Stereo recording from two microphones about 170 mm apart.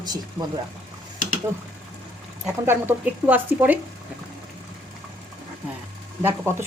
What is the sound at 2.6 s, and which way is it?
Speech, 10° right (ahead or behind).